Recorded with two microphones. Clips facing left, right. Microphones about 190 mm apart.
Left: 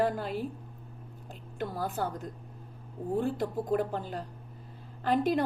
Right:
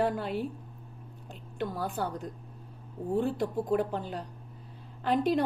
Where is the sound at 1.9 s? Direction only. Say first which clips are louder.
Even; centre (ahead or behind).